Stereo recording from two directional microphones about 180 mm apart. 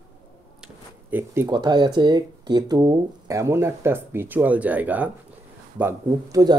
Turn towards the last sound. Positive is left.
turn(degrees=-20)  # may be behind; listen again after turning